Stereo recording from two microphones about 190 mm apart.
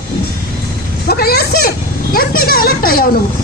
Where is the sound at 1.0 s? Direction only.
55° left (ahead or behind).